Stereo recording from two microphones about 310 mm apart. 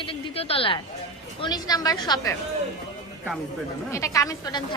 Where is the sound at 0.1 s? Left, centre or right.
Centre.